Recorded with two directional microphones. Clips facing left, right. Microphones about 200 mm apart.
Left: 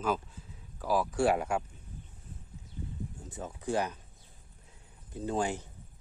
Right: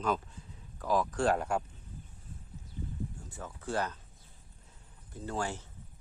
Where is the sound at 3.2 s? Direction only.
20° left (ahead or behind).